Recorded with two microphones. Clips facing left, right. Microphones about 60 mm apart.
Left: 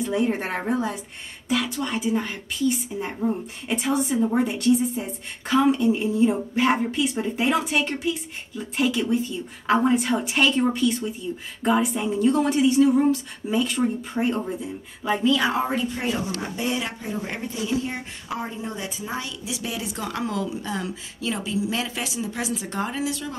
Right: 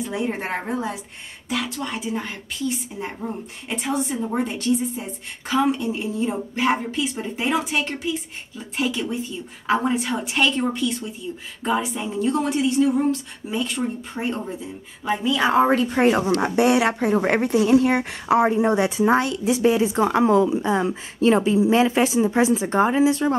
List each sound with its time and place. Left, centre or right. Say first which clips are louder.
0.0 s a woman's voice: left 2 dB; centre
15.5 s speech: right 7 dB; right
19.5 s speech: right 13 dB; right